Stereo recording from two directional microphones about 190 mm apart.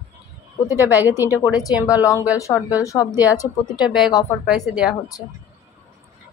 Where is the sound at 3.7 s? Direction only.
5° right (ahead or behind).